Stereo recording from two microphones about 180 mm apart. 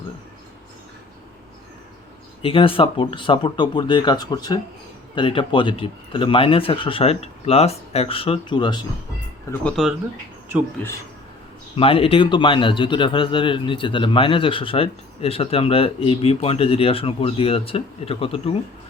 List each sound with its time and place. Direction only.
2.4 s speech: 30° left (ahead or behind)
11.8 s a man's voice: 30° left (ahead or behind)